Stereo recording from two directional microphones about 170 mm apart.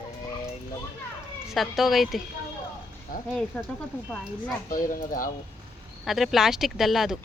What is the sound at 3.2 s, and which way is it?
Speech, 5° left (ahead or behind).